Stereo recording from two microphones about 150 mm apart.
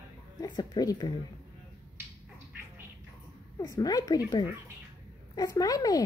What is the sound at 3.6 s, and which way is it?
Speech, 25° left (ahead or behind).